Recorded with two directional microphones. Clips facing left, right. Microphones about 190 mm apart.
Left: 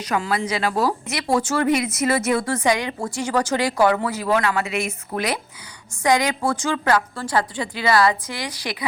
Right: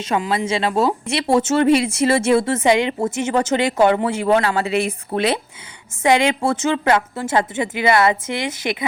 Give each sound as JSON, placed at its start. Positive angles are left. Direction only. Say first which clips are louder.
{"t": 0.0, "sound": "speech", "louder": "right 3 dB", "side_deg": -25}